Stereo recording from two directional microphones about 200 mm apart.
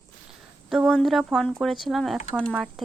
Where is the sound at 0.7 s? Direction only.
Centre (ahead or behind).